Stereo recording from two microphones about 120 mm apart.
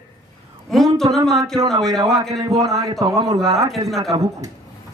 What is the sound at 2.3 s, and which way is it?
A man's voice, 30° right (ahead or behind).